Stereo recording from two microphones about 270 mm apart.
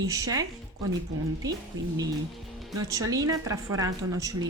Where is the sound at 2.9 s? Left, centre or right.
Centre.